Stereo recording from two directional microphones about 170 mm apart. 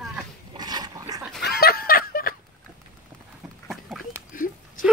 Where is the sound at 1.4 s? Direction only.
70° left (ahead or behind).